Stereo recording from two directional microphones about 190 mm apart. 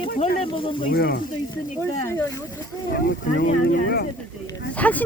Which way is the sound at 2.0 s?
15° left (ahead or behind).